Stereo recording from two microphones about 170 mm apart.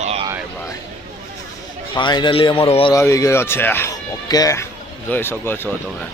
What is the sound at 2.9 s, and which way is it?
Speech, 15° left (ahead or behind).